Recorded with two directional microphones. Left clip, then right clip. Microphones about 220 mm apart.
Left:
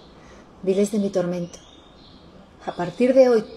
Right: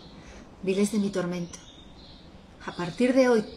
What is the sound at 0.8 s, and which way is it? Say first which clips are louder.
Speech: left 6 dB; 25° right (ahead or behind).